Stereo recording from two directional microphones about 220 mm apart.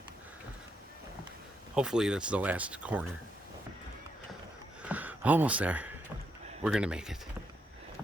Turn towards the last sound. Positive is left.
turn(degrees=-5)  # may be behind; listen again after turning